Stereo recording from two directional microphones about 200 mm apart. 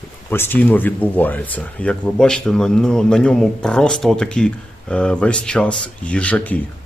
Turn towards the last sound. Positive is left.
turn(degrees=5)  # may be behind; listen again after turning